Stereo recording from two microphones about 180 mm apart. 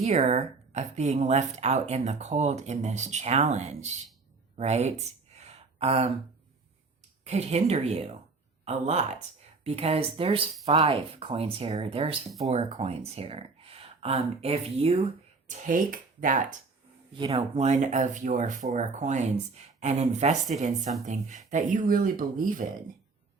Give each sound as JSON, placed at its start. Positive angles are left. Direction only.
{"t": 0.0, "sound": "a woman's voice", "side_deg": -35}
{"t": 4.5, "sound": "a sound", "side_deg": -35}
{"t": 7.3, "sound": "a woman's voice", "side_deg": -35}
{"t": 17.2, "sound": "a woman's voice", "side_deg": -30}